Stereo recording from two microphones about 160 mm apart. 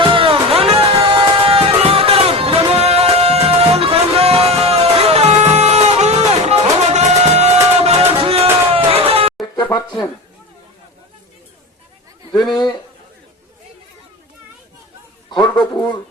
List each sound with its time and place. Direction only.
0.0 s music: 30° right (ahead or behind)
9.7 s a sound: 30° left (ahead or behind)
12.3 s a man's voice: 25° left (ahead or behind)
15.4 s a man's voice: 25° left (ahead or behind)